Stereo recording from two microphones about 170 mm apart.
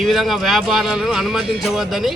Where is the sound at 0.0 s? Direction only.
Centre (ahead or behind).